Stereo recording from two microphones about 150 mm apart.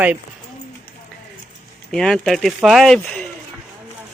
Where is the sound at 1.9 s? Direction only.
5° left (ahead or behind).